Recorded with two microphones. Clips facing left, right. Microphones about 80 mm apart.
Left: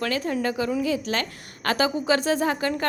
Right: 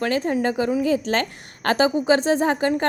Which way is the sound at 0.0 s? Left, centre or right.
Right.